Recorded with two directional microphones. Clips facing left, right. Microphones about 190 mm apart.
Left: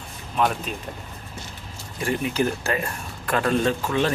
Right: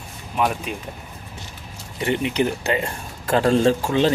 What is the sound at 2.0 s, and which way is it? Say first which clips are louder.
Speech: right 3 dB; 20° right (ahead or behind).